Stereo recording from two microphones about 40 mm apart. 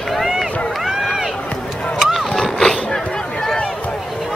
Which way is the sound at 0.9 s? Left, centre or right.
Centre.